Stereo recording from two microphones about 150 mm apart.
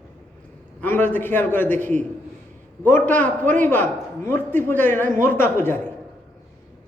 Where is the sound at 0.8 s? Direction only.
15° left (ahead or behind).